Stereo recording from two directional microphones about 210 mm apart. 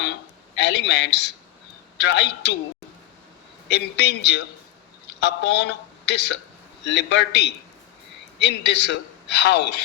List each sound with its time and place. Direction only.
0.6 s a man's voice: 55° left (ahead or behind)
3.7 s a man's voice: 55° left (ahead or behind)